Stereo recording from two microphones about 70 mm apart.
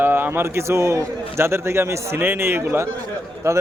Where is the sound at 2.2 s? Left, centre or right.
Right.